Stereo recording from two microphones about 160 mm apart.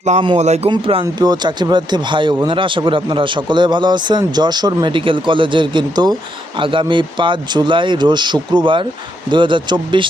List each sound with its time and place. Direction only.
0.0 s speech: 45° right (ahead or behind)
0.7 s speech: 35° right (ahead or behind)